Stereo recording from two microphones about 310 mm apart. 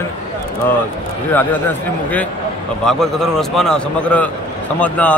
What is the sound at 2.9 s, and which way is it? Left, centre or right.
A man's voice, centre.